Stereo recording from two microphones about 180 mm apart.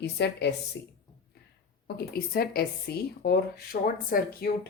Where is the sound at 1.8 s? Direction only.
60° left (ahead or behind).